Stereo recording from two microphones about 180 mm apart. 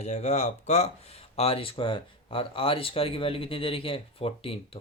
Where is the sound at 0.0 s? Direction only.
40° left (ahead or behind).